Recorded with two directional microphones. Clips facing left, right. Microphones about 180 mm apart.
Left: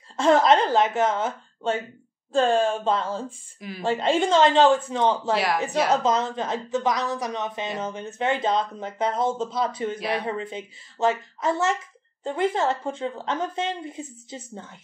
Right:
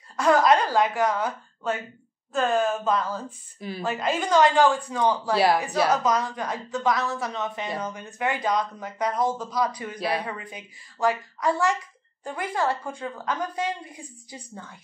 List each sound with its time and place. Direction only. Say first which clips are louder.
0.2 s speech: left 1 dB; 25° left (ahead or behind)